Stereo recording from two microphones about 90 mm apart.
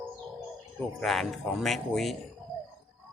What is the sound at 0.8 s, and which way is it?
Speech, 5° left (ahead or behind).